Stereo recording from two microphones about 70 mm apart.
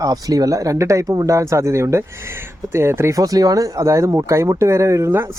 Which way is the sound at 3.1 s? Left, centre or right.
Right.